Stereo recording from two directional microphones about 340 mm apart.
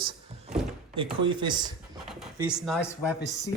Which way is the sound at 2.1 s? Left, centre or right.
Centre.